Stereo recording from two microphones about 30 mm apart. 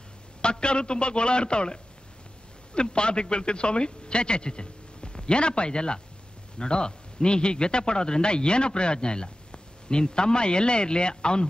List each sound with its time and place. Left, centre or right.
0.4 s a man's voice: left